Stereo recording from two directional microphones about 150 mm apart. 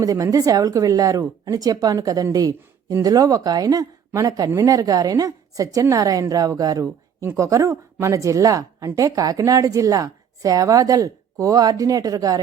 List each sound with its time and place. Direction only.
0.0 s a woman's voice: 25° right (ahead or behind)